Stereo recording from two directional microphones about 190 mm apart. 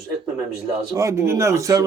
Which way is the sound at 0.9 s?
15° right (ahead or behind).